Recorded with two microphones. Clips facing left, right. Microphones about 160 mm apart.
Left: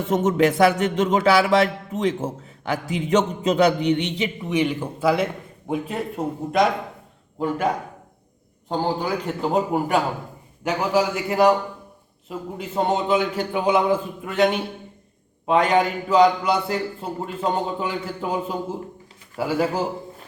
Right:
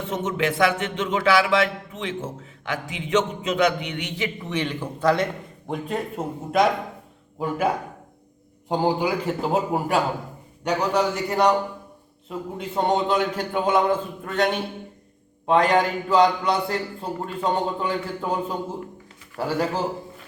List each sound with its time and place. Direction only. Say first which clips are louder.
0.1 s speech: left 7 dB; 40° left (ahead or behind)
4.4 s a man's voice: left 8 dB; 10° left (ahead or behind); by 7.7 s 5° right (ahead or behind)
9.0 s a man's voice: right 1 dB; 10° right (ahead or behind)